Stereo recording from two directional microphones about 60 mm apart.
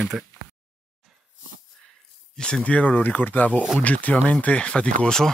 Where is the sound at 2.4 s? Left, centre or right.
Centre.